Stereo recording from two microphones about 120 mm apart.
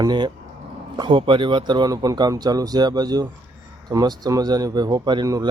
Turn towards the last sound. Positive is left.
turn(degrees=-30)  # may be behind; listen again after turning